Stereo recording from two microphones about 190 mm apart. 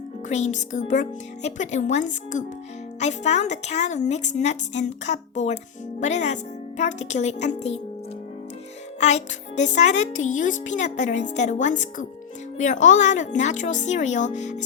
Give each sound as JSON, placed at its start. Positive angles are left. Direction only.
{"t": 0.3, "sound": "speech", "side_deg": 40}
{"t": 9.0, "sound": "speech", "side_deg": 35}